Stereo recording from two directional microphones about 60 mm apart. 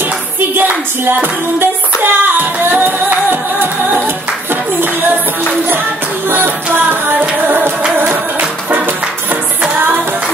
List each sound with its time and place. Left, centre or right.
0.6 s music: right
6.3 s music: right